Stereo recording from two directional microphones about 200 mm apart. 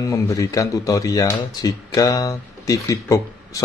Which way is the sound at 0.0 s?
15° left (ahead or behind).